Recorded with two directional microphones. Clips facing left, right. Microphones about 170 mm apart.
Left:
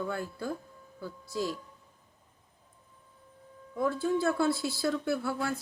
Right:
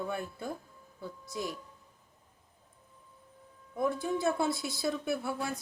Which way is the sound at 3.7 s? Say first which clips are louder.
Left 2 dB; 20° right (ahead or behind).